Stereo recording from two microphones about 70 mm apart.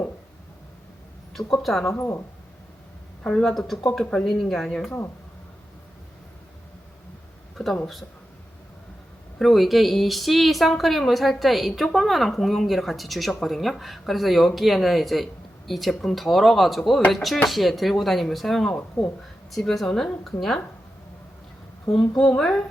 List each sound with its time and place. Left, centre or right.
1.3 s a woman's voice: centre
1.9 s speech: left
3.2 s a woman's voice: centre
7.5 s speech: centre
9.4 s a woman's voice: centre
21.8 s a woman's voice: centre